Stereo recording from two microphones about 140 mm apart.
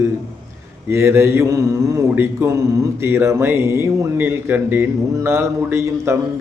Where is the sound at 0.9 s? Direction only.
20° right (ahead or behind).